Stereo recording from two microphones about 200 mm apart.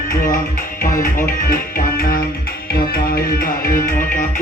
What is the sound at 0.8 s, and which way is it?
Music, 45° left (ahead or behind).